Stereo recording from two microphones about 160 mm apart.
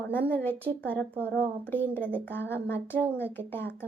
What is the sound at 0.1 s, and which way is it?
Speech, 10° left (ahead or behind).